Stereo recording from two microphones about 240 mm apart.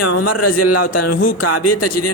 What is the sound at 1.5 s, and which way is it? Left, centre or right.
Speech, left.